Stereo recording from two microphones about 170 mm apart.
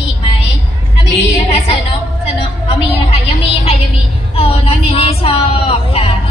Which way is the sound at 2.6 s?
35° left (ahead or behind).